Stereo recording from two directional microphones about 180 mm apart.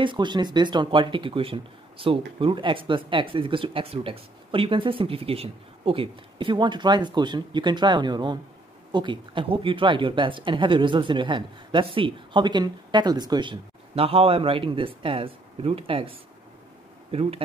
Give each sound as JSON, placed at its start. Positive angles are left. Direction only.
{"t": 0.0, "sound": "speech", "side_deg": -25}